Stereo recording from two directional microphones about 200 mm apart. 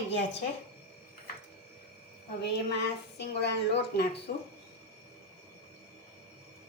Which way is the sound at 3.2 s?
55° left (ahead or behind).